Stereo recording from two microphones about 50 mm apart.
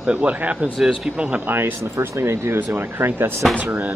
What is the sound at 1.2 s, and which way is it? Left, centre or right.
Speech, right.